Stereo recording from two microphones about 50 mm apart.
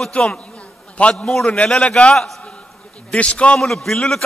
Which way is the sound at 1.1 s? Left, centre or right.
Centre.